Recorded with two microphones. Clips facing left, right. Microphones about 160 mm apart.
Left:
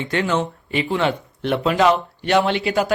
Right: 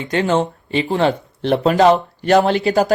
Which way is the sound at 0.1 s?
40° right (ahead or behind).